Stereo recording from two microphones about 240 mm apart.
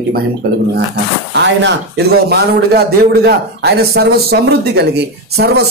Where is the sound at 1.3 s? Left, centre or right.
Right.